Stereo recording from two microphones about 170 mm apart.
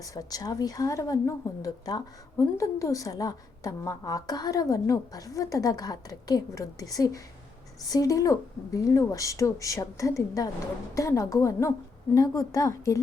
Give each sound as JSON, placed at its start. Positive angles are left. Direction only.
{"t": 0.0, "sound": "a woman's voice", "side_deg": 20}